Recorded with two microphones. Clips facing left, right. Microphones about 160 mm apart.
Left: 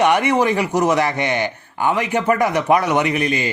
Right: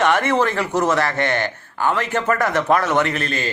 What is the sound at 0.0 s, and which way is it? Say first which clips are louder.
A man's voice: left 2 dB; 15° left (ahead or behind).